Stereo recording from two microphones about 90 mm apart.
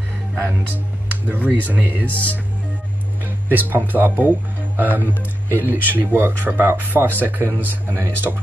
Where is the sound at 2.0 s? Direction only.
15° left (ahead or behind).